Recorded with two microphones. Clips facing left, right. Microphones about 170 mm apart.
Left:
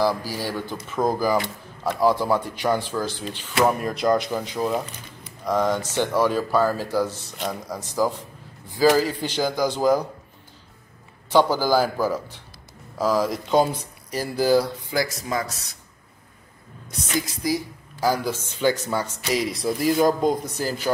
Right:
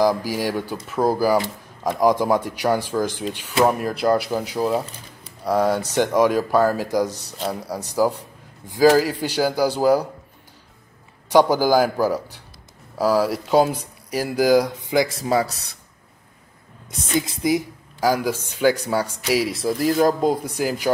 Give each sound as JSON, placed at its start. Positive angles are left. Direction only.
{"t": 0.0, "sound": "speech", "side_deg": -15}
{"t": 3.6, "sound": "speech", "side_deg": -5}
{"t": 7.1, "sound": "a man's voice", "side_deg": -40}
{"t": 8.7, "sound": "speech", "side_deg": -10}
{"t": 11.3, "sound": "speech", "side_deg": -15}
{"t": 17.4, "sound": "speech", "side_deg": -20}